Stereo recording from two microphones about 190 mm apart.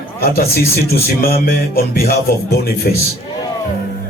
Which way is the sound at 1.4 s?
50° left (ahead or behind).